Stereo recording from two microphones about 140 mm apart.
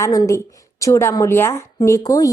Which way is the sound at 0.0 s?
25° left (ahead or behind).